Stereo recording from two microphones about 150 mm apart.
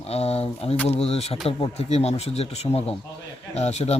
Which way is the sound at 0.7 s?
10° left (ahead or behind).